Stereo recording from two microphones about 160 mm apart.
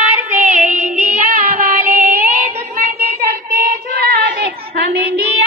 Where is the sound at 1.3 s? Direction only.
55° right (ahead or behind).